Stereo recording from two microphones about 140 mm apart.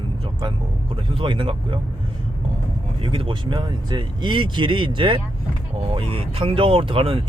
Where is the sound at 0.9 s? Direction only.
35° right (ahead or behind).